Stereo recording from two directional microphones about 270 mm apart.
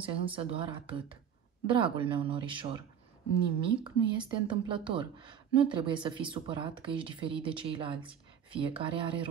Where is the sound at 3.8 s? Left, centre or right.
Centre.